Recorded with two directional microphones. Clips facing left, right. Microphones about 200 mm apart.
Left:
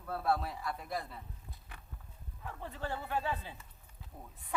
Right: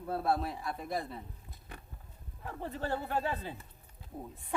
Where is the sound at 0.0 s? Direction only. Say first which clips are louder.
Right 2 dB; 25° right (ahead or behind).